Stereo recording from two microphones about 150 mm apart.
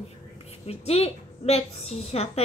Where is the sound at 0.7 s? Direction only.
40° left (ahead or behind).